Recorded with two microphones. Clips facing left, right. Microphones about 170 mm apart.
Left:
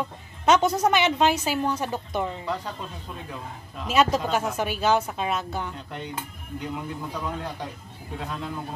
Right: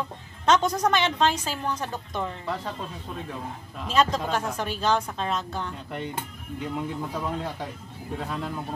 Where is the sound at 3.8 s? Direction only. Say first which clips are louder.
Left 2 dB; 5° left (ahead or behind).